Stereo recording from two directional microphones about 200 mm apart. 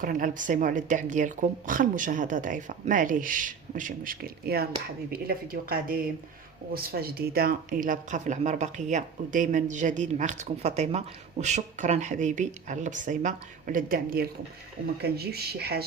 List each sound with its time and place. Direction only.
0.0 s speech: 40° right (ahead or behind)